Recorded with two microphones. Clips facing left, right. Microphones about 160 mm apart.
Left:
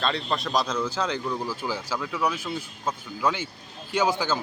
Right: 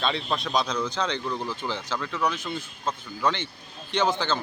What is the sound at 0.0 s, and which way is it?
Speech, centre (ahead or behind).